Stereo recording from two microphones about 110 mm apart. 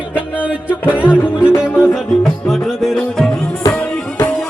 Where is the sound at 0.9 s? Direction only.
15° left (ahead or behind).